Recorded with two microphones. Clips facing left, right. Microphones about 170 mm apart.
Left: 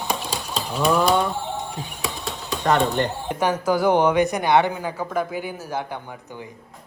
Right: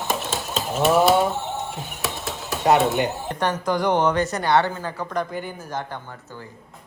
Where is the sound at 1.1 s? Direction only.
40° right (ahead or behind).